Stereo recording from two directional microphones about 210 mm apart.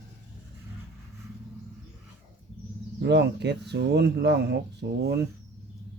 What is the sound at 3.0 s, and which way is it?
Speech, 55° right (ahead or behind).